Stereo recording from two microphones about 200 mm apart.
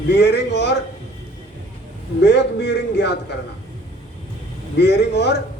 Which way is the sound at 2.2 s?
60° left (ahead or behind).